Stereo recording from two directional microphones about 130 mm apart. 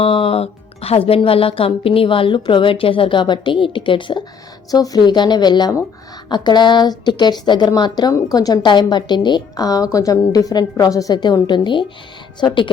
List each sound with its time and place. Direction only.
0.0 s speech: 45° left (ahead or behind)
4.7 s a woman's voice: 30° left (ahead or behind)